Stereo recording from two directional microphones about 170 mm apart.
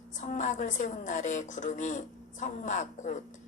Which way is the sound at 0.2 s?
45° left (ahead or behind).